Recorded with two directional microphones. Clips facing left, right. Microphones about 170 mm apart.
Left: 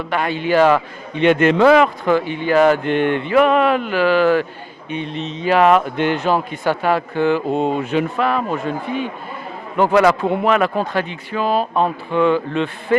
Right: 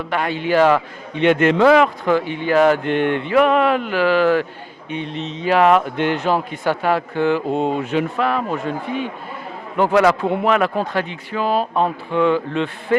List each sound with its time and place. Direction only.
0.1 s speech: 10° left (ahead or behind)
11.7 s speech: 25° left (ahead or behind)
12.1 s speech: 15° left (ahead or behind)